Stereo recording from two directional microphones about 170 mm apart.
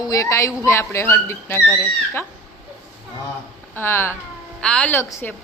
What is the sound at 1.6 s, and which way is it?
Speech, 5° left (ahead or behind).